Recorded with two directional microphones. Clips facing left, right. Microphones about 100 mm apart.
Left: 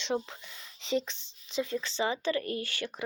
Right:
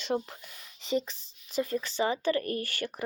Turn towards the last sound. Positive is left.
turn(degrees=-45)  # may be behind; listen again after turning